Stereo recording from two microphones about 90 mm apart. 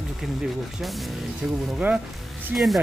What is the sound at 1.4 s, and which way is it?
Speech, 10° right (ahead or behind).